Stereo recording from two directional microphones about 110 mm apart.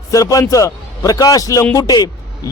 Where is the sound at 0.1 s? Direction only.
30° left (ahead or behind).